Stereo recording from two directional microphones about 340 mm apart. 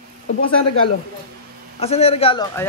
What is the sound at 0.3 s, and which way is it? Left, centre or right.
Speech, left.